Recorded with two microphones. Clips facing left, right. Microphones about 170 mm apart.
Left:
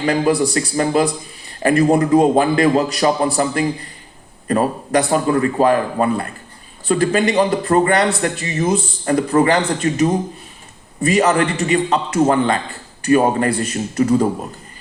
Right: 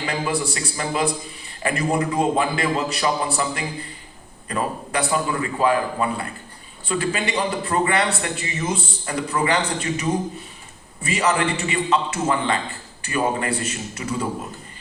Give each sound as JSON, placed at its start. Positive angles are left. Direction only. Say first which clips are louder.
{"t": 0.0, "sound": "a man's voice", "louder": "left 9 dB", "side_deg": 45}